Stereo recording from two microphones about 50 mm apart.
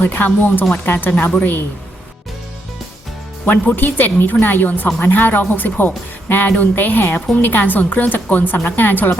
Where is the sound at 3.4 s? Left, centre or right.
Left.